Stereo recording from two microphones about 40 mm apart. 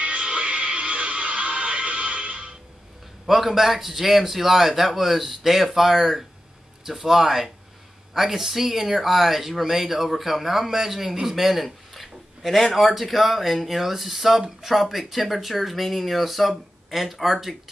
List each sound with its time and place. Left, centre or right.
0.0 s music: right
3.3 s speech: centre